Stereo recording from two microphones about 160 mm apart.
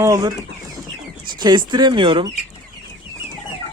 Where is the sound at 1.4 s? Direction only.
25° right (ahead or behind).